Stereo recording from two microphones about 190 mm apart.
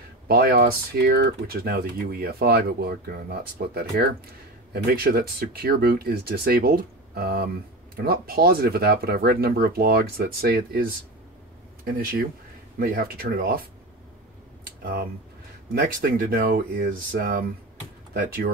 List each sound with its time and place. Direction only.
0.3 s speech: 50° right (ahead or behind)
14.8 s speech: 55° right (ahead or behind)